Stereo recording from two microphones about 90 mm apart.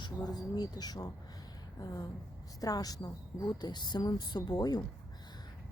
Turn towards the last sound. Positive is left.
turn(degrees=50)  # may be behind; listen again after turning